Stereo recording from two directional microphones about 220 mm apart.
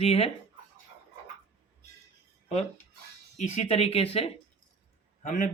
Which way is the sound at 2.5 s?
30° left (ahead or behind).